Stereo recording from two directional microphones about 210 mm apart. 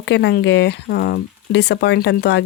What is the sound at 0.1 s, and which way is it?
Speech, 55° left (ahead or behind).